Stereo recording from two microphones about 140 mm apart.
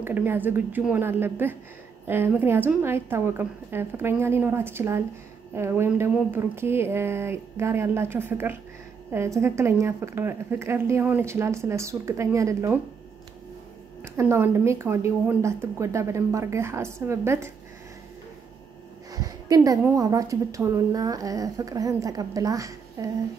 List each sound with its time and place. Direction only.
0.0 s speech: 15° right (ahead or behind)
14.0 s speech: 20° right (ahead or behind)
19.1 s a sound: 25° right (ahead or behind)
20.0 s speech: 25° right (ahead or behind)